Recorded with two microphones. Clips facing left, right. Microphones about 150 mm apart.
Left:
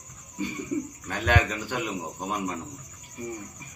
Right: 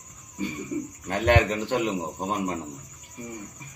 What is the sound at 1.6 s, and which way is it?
A man's voice, 25° right (ahead or behind).